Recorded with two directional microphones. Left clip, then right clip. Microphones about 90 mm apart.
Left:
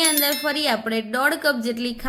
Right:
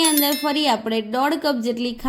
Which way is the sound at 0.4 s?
30° right (ahead or behind).